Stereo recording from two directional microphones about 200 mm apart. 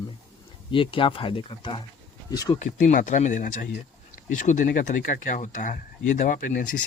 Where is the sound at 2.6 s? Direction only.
40° left (ahead or behind).